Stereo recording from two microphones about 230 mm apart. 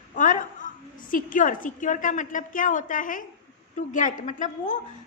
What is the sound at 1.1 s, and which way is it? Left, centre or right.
A woman's voice, left.